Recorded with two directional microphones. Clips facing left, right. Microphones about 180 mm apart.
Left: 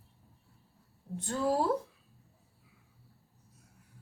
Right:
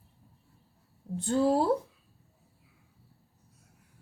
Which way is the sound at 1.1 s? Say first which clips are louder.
Right 5 dB; 30° right (ahead or behind).